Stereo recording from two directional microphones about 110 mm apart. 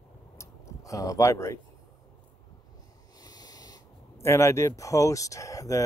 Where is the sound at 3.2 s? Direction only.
35° left (ahead or behind).